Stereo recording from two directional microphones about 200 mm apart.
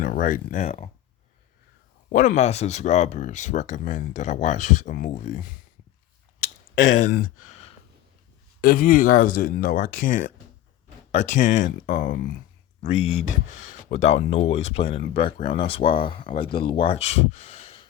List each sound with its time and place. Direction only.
0.0 s speech: 45° left (ahead or behind)
2.1 s speech: 35° left (ahead or behind)
6.4 s clicking: 35° left (ahead or behind)
8.6 s speech: 45° left (ahead or behind)
12.8 s speech: 30° left (ahead or behind)